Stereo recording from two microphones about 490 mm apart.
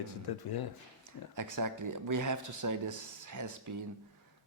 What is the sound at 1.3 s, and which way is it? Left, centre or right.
Speech, right.